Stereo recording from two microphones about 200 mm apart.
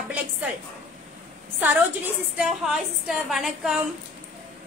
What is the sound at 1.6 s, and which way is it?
A woman's voice, 10° right (ahead or behind).